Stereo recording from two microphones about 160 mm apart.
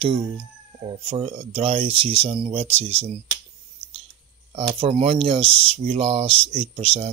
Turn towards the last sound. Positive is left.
turn(degrees=-35)  # may be behind; listen again after turning